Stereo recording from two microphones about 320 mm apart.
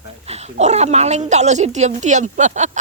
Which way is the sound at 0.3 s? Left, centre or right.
Centre.